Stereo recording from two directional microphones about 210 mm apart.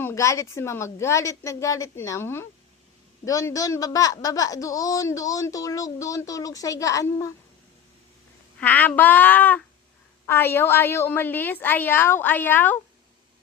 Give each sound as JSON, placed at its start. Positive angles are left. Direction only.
{"t": 0.0, "sound": "a man's voice", "side_deg": 15}
{"t": 8.5, "sound": "a man's voice", "side_deg": 10}